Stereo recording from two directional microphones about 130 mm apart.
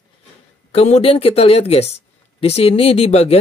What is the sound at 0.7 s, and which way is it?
Speech, 55° left (ahead or behind).